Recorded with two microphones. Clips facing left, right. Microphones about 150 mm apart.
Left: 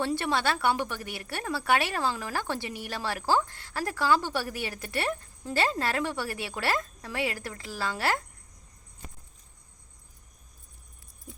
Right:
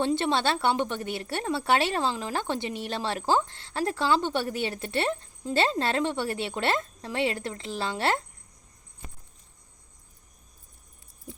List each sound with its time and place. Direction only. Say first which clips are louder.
0.0 s a woman's voice: right 3 dB; 25° right (ahead or behind)